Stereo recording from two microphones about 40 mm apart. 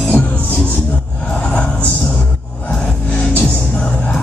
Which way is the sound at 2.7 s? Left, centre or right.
Left.